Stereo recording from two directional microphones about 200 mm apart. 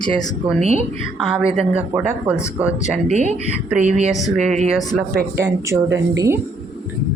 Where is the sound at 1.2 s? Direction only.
Centre (ahead or behind).